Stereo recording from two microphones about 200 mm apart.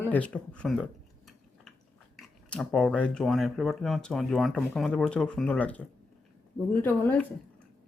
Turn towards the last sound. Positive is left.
turn(degrees=10)  # may be behind; listen again after turning